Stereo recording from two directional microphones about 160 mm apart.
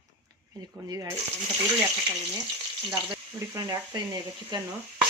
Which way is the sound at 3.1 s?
25° right (ahead or behind).